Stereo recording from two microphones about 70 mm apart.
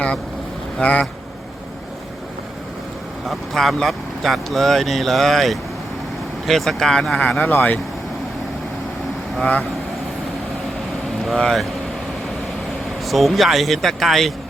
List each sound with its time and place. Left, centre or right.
0.8 s speech: left
3.2 s speech: centre
7.2 s speech: left
9.4 s speech: centre
11.2 s speech: centre
13.1 s speech: centre